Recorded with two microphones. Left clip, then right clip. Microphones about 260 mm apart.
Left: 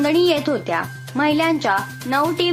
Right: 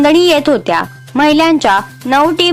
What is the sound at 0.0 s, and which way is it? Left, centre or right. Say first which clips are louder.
A woman's voice: right 8 dB; right.